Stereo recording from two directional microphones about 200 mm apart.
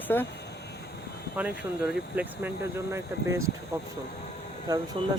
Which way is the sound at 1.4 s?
5° right (ahead or behind).